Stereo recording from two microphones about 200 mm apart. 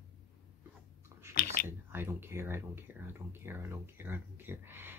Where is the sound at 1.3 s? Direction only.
50° left (ahead or behind).